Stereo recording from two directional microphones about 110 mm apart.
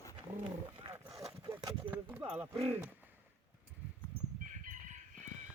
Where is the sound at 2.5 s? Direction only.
60° right (ahead or behind).